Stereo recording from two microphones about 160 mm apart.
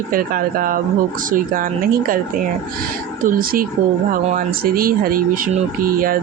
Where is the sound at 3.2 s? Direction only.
65° right (ahead or behind).